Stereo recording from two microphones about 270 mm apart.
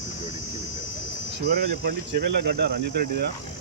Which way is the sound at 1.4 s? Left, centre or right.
Right.